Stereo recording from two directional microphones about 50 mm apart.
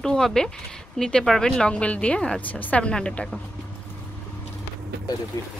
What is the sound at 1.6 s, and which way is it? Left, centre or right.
Speech, left.